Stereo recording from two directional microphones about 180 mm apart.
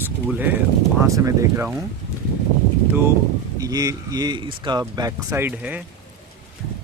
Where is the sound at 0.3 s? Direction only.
10° right (ahead or behind).